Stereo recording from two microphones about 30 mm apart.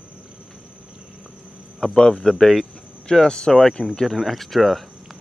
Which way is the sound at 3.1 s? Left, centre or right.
Left.